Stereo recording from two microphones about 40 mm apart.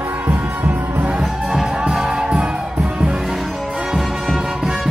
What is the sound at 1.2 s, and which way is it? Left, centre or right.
Music, centre.